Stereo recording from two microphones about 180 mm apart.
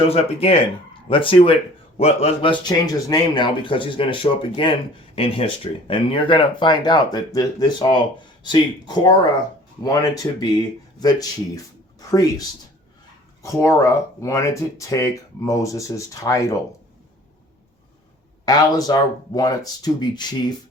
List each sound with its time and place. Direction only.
0.0 s speech: 35° left (ahead or behind)
13.4 s speech: 15° left (ahead or behind)
18.4 s speech: 20° left (ahead or behind)